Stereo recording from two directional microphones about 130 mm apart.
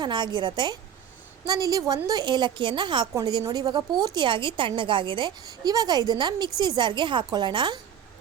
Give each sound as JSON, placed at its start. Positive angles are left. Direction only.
{"t": 0.0, "sound": "a woman's voice", "side_deg": -35}